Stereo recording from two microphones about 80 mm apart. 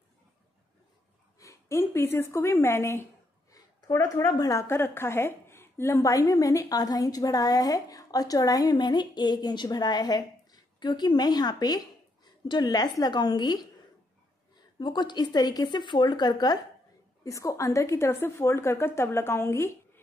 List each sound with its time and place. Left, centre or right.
1.4 s a woman's voice: left
4.6 s a woman's voice: left
14.8 s a woman's voice: left
17.2 s a woman's voice: left